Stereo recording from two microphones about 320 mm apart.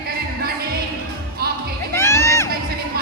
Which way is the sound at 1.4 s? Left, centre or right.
Right.